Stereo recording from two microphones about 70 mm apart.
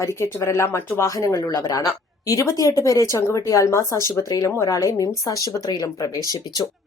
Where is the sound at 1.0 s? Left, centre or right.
Left.